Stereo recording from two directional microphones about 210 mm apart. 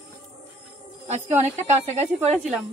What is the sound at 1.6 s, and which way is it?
Speech, 30° right (ahead or behind).